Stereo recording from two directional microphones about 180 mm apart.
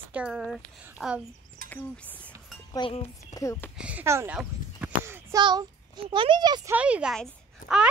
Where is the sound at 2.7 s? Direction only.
30° left (ahead or behind).